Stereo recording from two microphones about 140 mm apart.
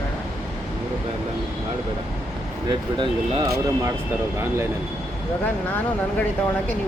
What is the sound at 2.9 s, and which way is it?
Speech, 35° right (ahead or behind).